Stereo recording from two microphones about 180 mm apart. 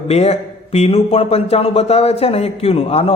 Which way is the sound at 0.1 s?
35° left (ahead or behind).